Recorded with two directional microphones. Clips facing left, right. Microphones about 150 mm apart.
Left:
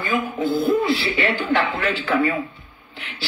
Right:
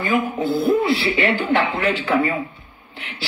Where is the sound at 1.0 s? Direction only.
25° right (ahead or behind).